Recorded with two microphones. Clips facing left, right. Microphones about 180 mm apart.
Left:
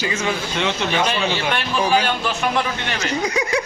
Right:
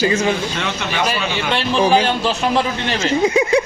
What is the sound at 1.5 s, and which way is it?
A man's voice, 30° right (ahead or behind).